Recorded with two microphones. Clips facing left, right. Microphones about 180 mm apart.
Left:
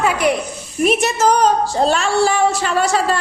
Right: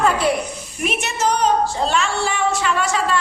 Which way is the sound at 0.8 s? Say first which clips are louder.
Left 7 dB; 35° left (ahead or behind).